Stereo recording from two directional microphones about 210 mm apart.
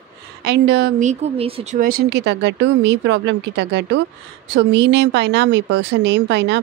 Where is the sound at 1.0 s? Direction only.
30° right (ahead or behind).